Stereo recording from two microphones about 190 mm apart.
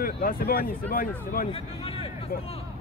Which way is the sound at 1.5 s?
30° left (ahead or behind).